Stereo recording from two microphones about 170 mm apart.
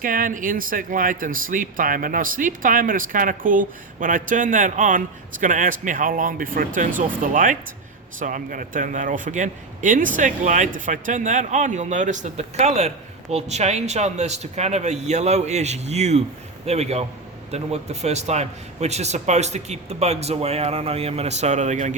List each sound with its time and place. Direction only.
0.0 s a man's voice: 55° right (ahead or behind)